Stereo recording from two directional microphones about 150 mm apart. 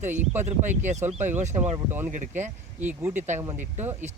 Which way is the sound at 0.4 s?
55° right (ahead or behind).